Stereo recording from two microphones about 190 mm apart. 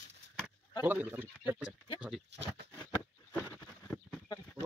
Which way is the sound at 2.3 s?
65° right (ahead or behind).